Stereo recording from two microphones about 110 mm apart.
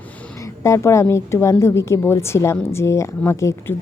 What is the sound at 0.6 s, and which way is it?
Speech, 25° left (ahead or behind).